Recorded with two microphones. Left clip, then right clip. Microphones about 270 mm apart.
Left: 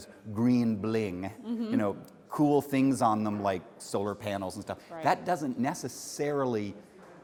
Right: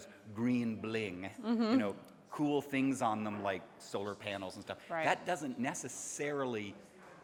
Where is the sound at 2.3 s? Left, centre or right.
Left.